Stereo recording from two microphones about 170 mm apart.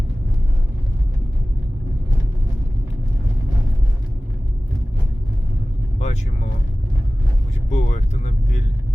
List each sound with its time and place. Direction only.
6.0 s vehicle: 40° left (ahead or behind)
7.7 s vehicle: 45° left (ahead or behind)